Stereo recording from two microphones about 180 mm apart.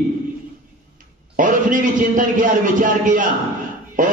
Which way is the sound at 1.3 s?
45° right (ahead or behind).